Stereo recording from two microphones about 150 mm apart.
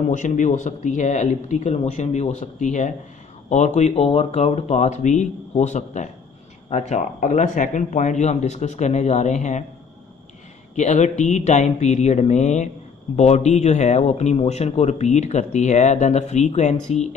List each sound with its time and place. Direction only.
0.1 s speech: 55° left (ahead or behind)
10.8 s speech: 50° left (ahead or behind)